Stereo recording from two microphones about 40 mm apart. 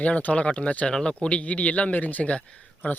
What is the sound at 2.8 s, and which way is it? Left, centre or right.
Speech, left.